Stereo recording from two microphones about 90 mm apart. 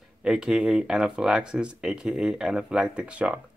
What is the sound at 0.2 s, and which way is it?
Speech, 5° right (ahead or behind).